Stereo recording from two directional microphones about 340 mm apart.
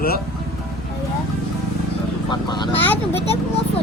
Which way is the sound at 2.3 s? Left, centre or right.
Centre.